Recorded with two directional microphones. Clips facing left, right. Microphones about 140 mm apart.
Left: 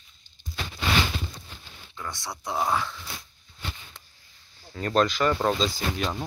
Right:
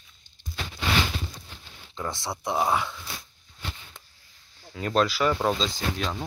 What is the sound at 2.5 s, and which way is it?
Speech, 15° right (ahead or behind).